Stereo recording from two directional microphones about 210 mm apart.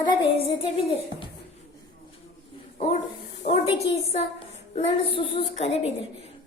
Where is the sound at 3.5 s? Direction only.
30° left (ahead or behind).